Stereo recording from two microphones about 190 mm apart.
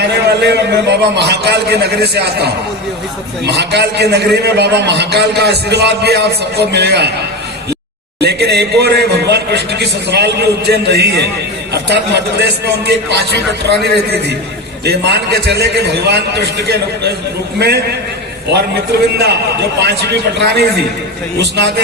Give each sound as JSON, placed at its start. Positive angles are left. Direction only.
{"t": 0.3, "sound": "a man's voice", "side_deg": -60}
{"t": 8.2, "sound": "a man's voice", "side_deg": -60}
{"t": 18.5, "sound": "a man's voice", "side_deg": -60}